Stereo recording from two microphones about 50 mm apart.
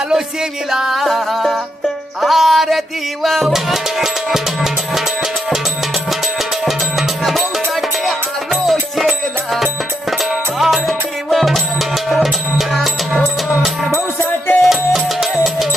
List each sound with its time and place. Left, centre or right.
0.7 s music: centre
6.7 s music: centre
10.1 s music: centre
14.3 s music: left
14.6 s music: centre